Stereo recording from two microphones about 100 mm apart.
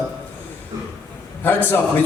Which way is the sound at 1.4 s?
20° left (ahead or behind).